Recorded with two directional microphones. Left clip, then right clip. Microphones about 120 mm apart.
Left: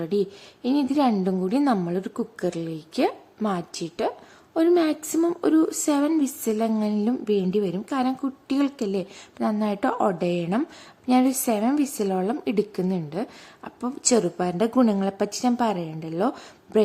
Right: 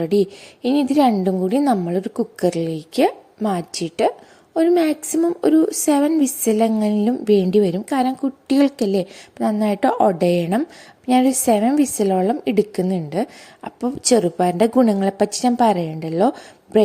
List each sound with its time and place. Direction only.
0.0 s a woman's voice: 35° right (ahead or behind)
2.4 s a woman's voice: 40° right (ahead or behind)
4.5 s a woman's voice: 20° right (ahead or behind)